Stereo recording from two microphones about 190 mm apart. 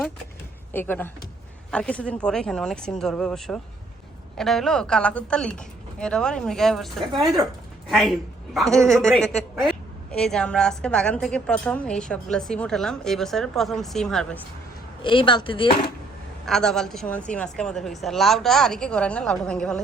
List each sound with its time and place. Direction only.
0.7 s a woman's voice: 10° left (ahead or behind)
7.1 s speech: 25° right (ahead or behind)
7.9 s a woman's voice: centre (ahead or behind)
15.0 s speech: 25° left (ahead or behind)
16.5 s a woman's voice: 5° left (ahead or behind)